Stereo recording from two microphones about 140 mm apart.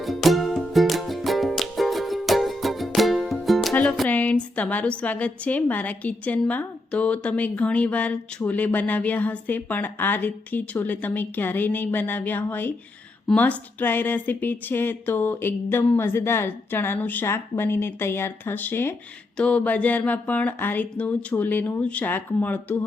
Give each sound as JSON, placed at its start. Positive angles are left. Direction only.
{"t": 0.0, "sound": "music", "side_deg": 0}
{"t": 4.1, "sound": "a woman's voice", "side_deg": 10}